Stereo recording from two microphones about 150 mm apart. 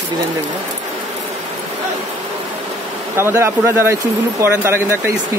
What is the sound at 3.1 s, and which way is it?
A man's voice, 15° right (ahead or behind).